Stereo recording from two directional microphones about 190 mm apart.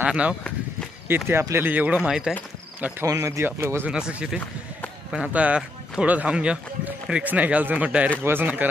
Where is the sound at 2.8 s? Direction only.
15° right (ahead or behind).